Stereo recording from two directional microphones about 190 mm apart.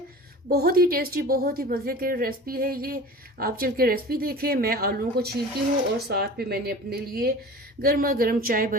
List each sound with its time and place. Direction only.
0.4 s a woman's voice: 55° right (ahead or behind)